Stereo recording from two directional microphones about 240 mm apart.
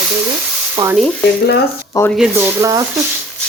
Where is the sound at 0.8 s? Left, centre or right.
Centre.